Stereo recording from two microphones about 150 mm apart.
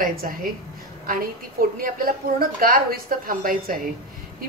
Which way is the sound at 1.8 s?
70° right (ahead or behind).